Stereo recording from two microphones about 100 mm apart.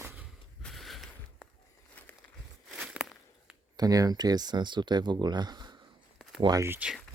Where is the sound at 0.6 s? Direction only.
Centre (ahead or behind).